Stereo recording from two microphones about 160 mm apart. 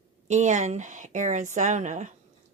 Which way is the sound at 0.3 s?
50° right (ahead or behind).